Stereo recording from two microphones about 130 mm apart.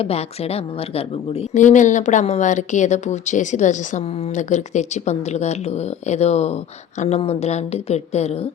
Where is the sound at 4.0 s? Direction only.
55° left (ahead or behind).